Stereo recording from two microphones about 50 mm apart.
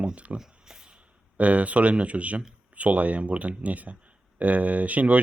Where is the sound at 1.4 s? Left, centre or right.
Right.